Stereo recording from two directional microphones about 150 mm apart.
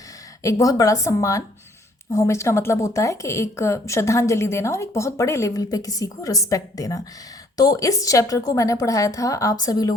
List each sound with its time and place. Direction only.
0.4 s speech: 25° left (ahead or behind)